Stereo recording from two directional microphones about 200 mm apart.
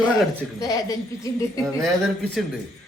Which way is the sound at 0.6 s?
15° left (ahead or behind).